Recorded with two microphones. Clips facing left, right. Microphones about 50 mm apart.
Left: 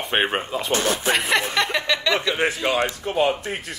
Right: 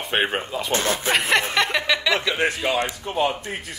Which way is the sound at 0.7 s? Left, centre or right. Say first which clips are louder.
Even; right.